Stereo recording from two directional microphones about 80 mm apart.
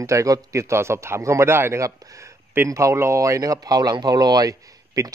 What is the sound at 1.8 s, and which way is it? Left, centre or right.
Speech, right.